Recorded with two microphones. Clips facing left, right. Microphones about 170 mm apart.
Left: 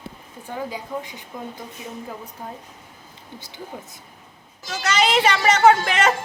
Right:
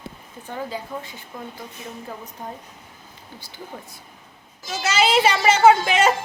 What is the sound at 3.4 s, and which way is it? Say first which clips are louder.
Speech: left 5 dB; 20° left (ahead or behind).